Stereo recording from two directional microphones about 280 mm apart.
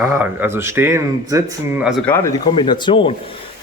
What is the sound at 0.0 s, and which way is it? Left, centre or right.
Speech, centre.